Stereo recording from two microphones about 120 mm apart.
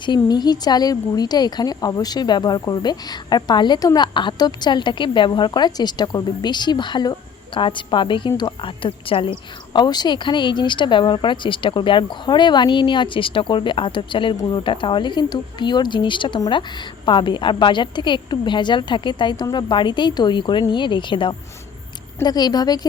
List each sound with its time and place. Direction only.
0.0 s a woman's voice: 40° left (ahead or behind)
9.7 s speech: 35° left (ahead or behind)